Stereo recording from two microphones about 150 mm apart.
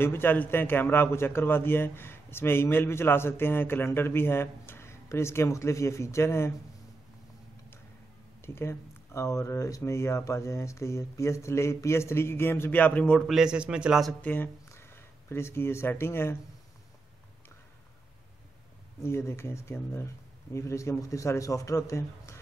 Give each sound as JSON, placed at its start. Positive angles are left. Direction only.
{"t": 0.0, "sound": "a man's voice", "side_deg": 15}
{"t": 8.4, "sound": "speech", "side_deg": 15}
{"t": 13.3, "sound": "a man's voice", "side_deg": -5}
{"t": 14.2, "sound": "speech", "side_deg": 15}
{"t": 19.0, "sound": "a man's voice", "side_deg": 15}